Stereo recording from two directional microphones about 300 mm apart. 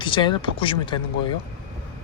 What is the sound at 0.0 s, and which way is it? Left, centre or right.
Speech, centre.